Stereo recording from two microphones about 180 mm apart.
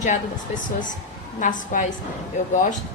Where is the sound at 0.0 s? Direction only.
45° left (ahead or behind).